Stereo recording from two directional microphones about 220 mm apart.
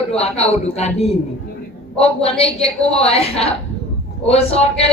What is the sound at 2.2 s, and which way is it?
A woman's voice, 25° left (ahead or behind).